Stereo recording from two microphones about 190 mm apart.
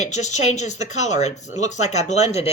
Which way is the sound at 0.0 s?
40° left (ahead or behind).